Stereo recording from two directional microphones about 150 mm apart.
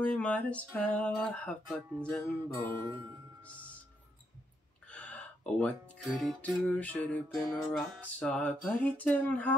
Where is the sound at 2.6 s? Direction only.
30° right (ahead or behind).